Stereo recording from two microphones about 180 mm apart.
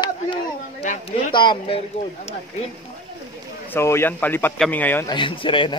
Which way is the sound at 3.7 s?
15° left (ahead or behind).